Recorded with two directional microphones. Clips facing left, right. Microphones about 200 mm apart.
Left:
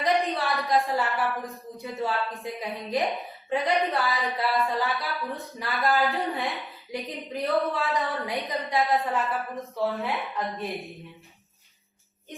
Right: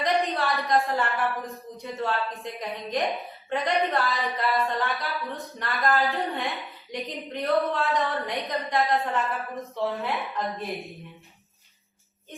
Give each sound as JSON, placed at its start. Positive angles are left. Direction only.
{"t": 0.0, "sound": "a woman's voice", "side_deg": 0}